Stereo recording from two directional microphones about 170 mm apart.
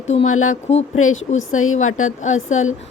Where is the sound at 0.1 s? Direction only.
40° left (ahead or behind).